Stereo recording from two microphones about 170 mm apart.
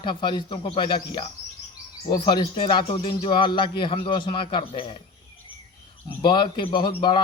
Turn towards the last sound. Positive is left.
turn(degrees=30)  # may be behind; listen again after turning